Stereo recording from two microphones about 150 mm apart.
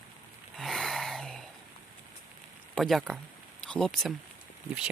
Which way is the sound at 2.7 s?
Centre (ahead or behind).